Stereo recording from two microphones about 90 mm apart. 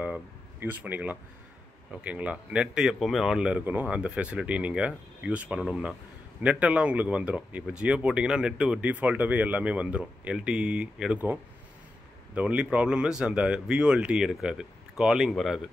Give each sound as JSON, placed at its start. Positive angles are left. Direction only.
{"t": 0.6, "sound": "speech", "side_deg": -20}
{"t": 12.4, "sound": "speech", "side_deg": -15}